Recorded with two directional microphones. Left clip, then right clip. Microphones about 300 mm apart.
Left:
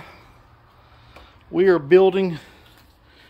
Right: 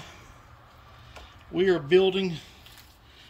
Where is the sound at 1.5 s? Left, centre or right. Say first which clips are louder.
Left 7 dB; centre.